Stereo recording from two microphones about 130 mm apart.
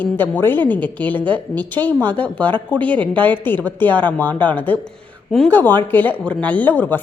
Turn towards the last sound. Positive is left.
turn(degrees=15)  # may be behind; listen again after turning